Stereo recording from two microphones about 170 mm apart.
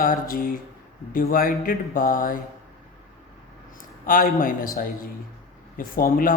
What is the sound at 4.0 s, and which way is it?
Speech, 55° left (ahead or behind).